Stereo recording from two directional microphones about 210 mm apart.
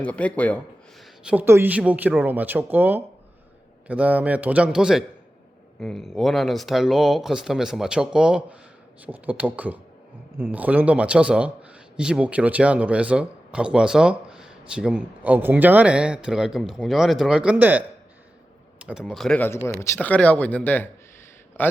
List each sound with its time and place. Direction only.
0.0 s speech: 5° left (ahead or behind)
1.2 s speech: 5° right (ahead or behind); by 21.7 s 10° left (ahead or behind)